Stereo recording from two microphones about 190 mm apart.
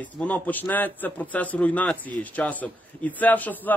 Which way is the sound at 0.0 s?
10° left (ahead or behind).